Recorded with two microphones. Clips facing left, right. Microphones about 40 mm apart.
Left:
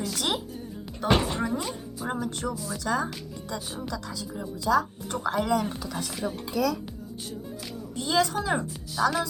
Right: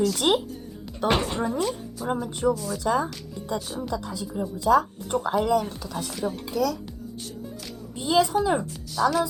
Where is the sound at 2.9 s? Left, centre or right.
Centre.